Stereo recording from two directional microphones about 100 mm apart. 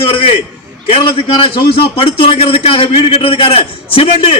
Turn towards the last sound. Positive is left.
turn(degrees=70)  # may be behind; listen again after turning